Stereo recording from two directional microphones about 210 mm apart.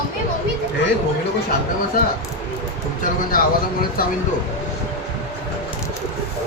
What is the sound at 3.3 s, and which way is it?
Speech, 45° left (ahead or behind).